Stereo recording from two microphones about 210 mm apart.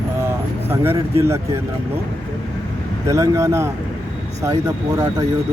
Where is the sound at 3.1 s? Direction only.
15° right (ahead or behind).